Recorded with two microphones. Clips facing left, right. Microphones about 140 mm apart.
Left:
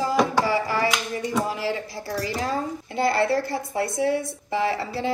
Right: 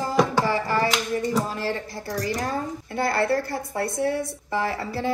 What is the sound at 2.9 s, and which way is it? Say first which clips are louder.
A woman's voice: left 1 dB; 20° left (ahead or behind).